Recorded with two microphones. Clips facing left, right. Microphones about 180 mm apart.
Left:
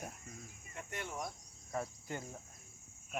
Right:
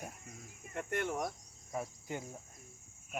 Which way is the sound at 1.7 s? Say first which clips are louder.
Right 1 dB; 10° right (ahead or behind).